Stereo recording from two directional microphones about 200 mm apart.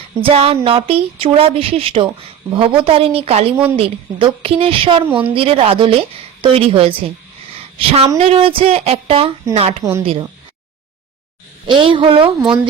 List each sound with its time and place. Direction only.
0.2 s speech: 30° right (ahead or behind)
11.6 s speech: 25° right (ahead or behind)